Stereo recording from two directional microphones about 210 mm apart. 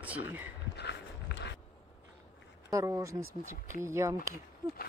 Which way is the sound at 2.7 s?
15° right (ahead or behind).